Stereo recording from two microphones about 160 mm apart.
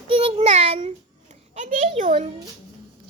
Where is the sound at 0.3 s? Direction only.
40° right (ahead or behind).